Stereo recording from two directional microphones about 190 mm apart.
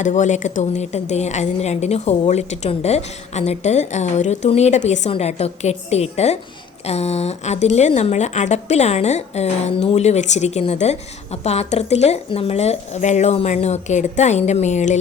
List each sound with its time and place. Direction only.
0.0 s speech: 40° left (ahead or behind)